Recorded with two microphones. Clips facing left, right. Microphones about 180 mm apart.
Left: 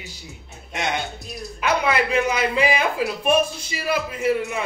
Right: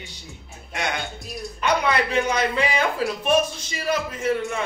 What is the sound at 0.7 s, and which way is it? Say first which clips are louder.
Speech: left 2 dB; 25° left (ahead or behind).